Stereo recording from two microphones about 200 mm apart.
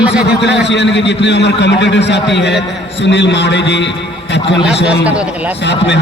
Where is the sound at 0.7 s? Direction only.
60° left (ahead or behind).